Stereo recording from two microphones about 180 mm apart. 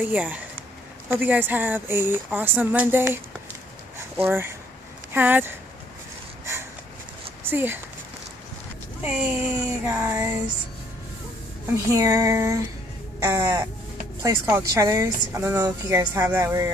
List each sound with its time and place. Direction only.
0.0 s a woman's voice: 10° right (ahead or behind)
4.2 s a woman's voice: 15° right (ahead or behind)
7.4 s speech: 10° right (ahead or behind)
9.0 s a woman's voice: 5° right (ahead or behind)
11.7 s a woman's voice: 15° right (ahead or behind)